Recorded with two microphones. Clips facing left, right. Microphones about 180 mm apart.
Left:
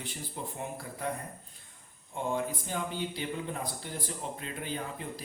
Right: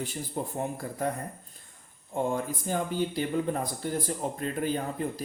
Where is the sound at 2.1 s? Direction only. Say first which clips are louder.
Right 3 dB; 45° right (ahead or behind).